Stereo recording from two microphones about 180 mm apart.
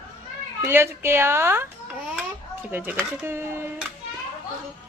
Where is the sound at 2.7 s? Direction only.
10° right (ahead or behind).